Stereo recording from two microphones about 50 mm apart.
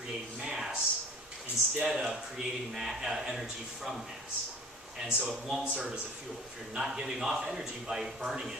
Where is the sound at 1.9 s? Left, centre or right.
Centre.